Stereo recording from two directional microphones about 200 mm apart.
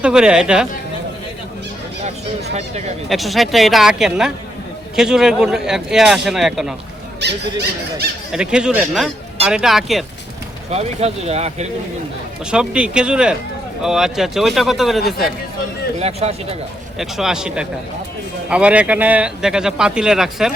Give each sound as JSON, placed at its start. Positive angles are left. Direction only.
{"t": 0.0, "sound": "speech", "side_deg": -5}
{"t": 2.6, "sound": "speech", "side_deg": -35}
{"t": 3.1, "sound": "speech", "side_deg": 0}
{"t": 7.2, "sound": "squeak", "side_deg": -60}
{"t": 8.3, "sound": "speech", "side_deg": -5}
{"t": 10.7, "sound": "speech", "side_deg": -30}
{"t": 12.5, "sound": "speech", "side_deg": -5}
{"t": 16.0, "sound": "speech", "side_deg": -30}
{"t": 17.0, "sound": "speech", "side_deg": 0}